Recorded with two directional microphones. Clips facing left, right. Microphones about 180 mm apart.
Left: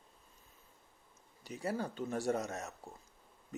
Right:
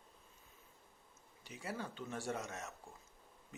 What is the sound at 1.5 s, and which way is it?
Speech, 40° left (ahead or behind).